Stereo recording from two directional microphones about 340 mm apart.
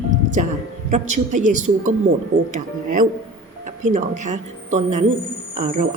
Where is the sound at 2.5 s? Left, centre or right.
Right.